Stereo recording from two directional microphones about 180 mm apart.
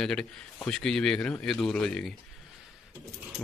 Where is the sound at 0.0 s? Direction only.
5° left (ahead or behind).